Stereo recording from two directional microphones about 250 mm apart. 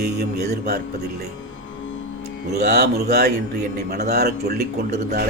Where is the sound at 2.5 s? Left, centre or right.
Right.